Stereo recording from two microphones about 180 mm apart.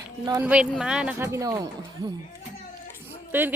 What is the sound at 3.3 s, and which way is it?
Speech, 10° right (ahead or behind).